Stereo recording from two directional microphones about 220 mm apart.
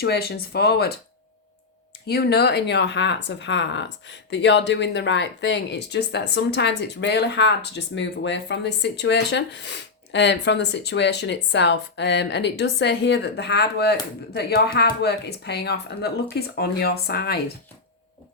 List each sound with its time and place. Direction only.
0.0 s speech: 45° left (ahead or behind)
2.0 s speech: 45° left (ahead or behind)